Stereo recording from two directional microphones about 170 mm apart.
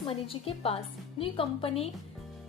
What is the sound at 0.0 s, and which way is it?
A woman's voice, 35° left (ahead or behind).